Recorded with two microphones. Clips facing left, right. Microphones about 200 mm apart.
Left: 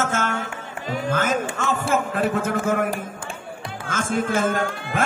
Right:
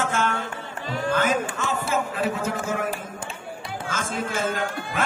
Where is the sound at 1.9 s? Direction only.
50° left (ahead or behind).